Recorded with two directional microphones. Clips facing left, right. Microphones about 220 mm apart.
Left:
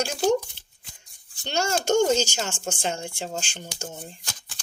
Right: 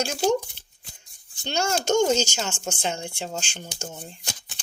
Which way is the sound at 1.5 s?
55° left (ahead or behind).